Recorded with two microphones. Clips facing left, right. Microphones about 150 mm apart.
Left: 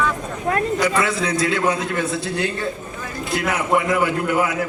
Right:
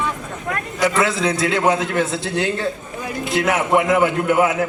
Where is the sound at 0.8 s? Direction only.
25° right (ahead or behind).